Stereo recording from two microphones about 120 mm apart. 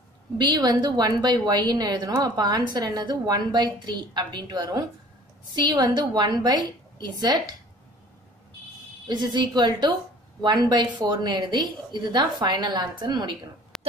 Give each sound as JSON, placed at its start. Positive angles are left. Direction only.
{"t": 0.4, "sound": "a woman's voice", "side_deg": -35}
{"t": 9.0, "sound": "a woman's voice", "side_deg": -40}
{"t": 13.7, "sound": "a sound", "side_deg": 5}